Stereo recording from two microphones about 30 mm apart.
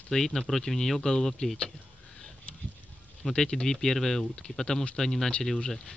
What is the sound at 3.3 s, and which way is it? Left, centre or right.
Speech, left.